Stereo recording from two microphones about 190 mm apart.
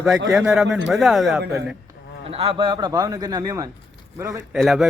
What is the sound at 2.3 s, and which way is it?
A man's voice, 30° right (ahead or behind).